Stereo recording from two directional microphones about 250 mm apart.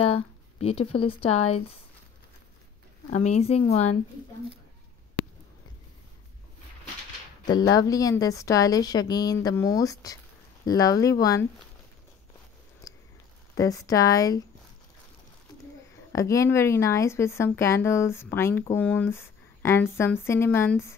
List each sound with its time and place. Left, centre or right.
0.0 s speech: left
3.1 s speech: left
7.4 s a woman's voice: centre
12.8 s biting: centre
13.6 s a woman's voice: centre
16.1 s a woman's voice: centre